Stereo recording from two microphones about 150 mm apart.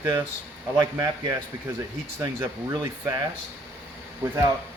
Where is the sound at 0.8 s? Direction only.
25° right (ahead or behind).